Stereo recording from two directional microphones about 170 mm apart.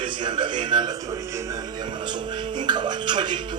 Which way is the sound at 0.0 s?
30° right (ahead or behind).